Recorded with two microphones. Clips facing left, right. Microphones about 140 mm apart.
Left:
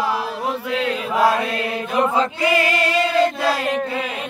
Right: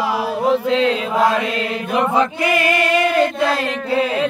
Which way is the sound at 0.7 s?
90° right.